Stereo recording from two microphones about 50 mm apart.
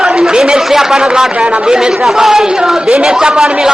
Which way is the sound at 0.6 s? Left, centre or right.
Centre.